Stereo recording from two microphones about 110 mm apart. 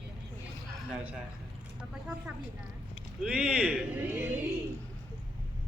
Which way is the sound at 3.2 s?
10° right (ahead or behind).